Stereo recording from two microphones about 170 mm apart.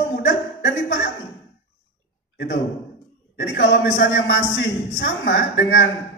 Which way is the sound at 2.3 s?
90° left.